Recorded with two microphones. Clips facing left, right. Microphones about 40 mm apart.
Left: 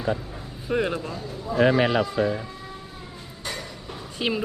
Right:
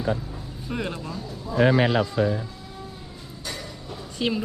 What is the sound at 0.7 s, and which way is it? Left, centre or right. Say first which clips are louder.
Speech: left 5 dB; centre.